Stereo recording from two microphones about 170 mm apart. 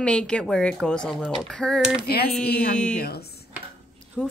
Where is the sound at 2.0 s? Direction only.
65° left (ahead or behind).